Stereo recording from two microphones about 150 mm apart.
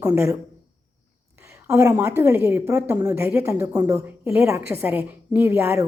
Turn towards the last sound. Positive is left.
turn(degrees=-15)  # may be behind; listen again after turning